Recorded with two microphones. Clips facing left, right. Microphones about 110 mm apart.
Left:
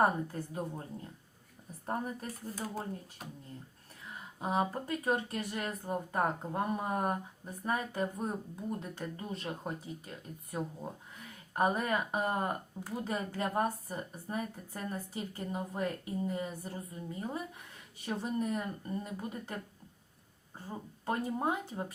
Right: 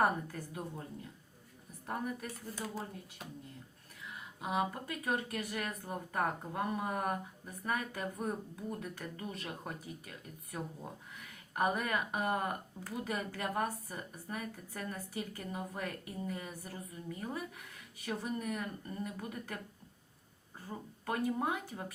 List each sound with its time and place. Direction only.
0.0 s speech: 25° left (ahead or behind)
1.9 s speech: 35° left (ahead or behind)
4.4 s speech: 35° left (ahead or behind)
20.7 s speech: 25° left (ahead or behind)